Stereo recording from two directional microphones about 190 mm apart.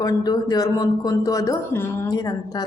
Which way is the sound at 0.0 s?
20° left (ahead or behind).